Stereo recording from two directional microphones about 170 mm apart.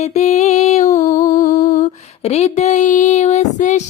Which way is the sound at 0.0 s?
40° left (ahead or behind).